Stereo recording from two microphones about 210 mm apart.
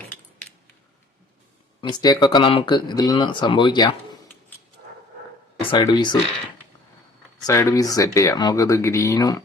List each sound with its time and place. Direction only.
1.8 s speech: 20° left (ahead or behind)
5.7 s speech: 20° left (ahead or behind)
7.4 s speech: 15° left (ahead or behind)